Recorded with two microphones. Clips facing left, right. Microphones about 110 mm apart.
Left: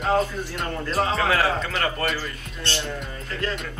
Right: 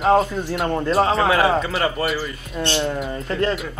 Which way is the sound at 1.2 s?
10° right (ahead or behind).